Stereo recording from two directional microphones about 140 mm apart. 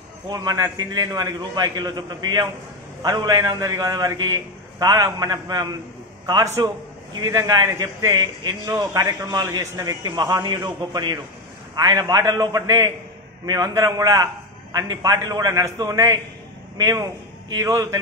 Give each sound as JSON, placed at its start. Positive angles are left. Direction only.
{"t": 0.3, "sound": "a man's voice", "side_deg": -30}